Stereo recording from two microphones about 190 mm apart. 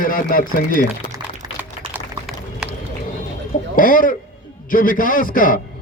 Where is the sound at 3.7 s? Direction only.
45° left (ahead or behind).